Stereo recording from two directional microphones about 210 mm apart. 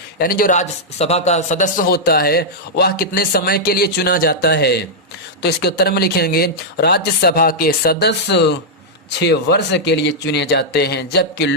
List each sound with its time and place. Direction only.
0.2 s a man's voice: 45° left (ahead or behind)